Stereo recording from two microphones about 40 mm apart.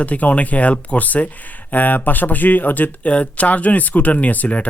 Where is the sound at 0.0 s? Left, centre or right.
Left.